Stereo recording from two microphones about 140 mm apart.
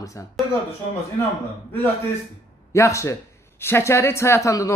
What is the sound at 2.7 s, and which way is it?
A woman's voice, 20° left (ahead or behind).